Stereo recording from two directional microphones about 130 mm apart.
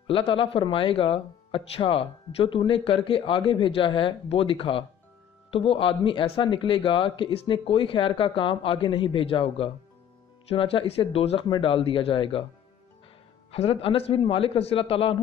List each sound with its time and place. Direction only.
0.0 s speech: 45° left (ahead or behind)
13.5 s speech: 50° left (ahead or behind)